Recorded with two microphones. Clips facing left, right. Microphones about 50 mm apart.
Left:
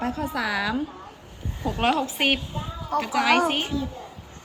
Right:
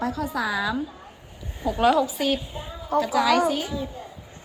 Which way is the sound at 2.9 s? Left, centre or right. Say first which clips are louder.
Right 1 dB; left.